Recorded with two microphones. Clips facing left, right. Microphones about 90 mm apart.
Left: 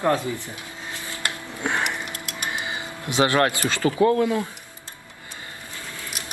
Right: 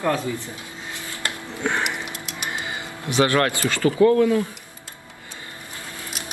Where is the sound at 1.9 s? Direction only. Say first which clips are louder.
Even; 20° right (ahead or behind).